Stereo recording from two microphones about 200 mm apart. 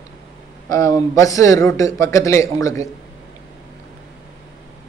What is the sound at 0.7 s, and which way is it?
A man's voice, 15° left (ahead or behind).